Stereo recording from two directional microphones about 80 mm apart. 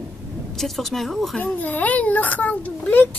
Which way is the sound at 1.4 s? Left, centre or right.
Left.